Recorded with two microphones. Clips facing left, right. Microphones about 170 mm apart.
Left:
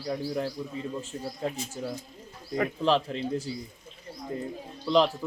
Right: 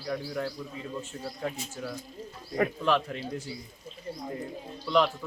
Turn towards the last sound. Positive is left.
turn(degrees=30)  # may be behind; listen again after turning